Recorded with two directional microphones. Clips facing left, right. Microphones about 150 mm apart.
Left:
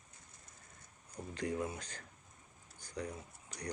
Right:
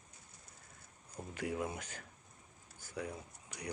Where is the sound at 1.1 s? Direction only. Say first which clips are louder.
Left 1 dB; 10° right (ahead or behind).